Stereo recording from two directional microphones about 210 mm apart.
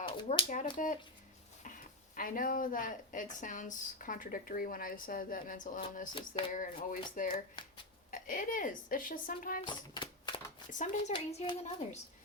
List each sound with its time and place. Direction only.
0.3 s speech: 35° left (ahead or behind)
2.1 s speech: 40° left (ahead or behind)
5.8 s a sound: 25° left (ahead or behind)
6.5 s speech: 40° left (ahead or behind)
9.6 s typewriter: 20° left (ahead or behind)
10.7 s speech: 35° left (ahead or behind)